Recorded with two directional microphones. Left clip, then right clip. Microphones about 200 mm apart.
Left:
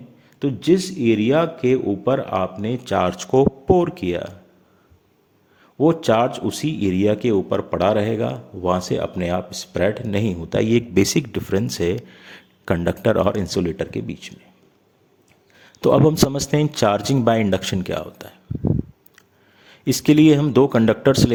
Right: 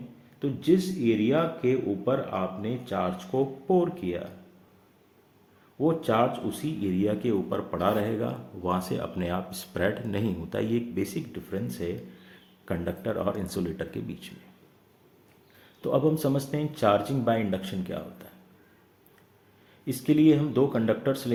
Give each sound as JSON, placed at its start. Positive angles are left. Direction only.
{"t": 0.3, "sound": "a man's voice", "side_deg": 50}
{"t": 5.8, "sound": "a man's voice", "side_deg": 55}
{"t": 15.8, "sound": "speech", "side_deg": 55}
{"t": 19.6, "sound": "speech", "side_deg": 55}